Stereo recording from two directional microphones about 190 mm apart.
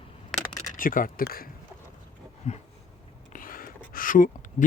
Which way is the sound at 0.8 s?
45° left (ahead or behind).